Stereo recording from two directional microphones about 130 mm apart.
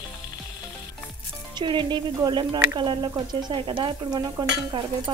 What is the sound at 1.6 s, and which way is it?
Speech, 35° right (ahead or behind).